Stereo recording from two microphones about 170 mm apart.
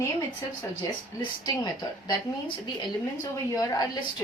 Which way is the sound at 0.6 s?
25° left (ahead or behind).